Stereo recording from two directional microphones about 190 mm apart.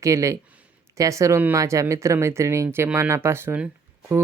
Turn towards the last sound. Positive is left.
turn(degrees=-10)  # may be behind; listen again after turning